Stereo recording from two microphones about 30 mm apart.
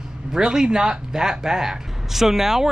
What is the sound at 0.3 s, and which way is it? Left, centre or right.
Speech, right.